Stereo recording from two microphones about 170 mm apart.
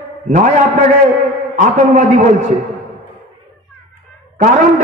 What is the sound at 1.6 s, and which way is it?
Speech, 45° right (ahead or behind).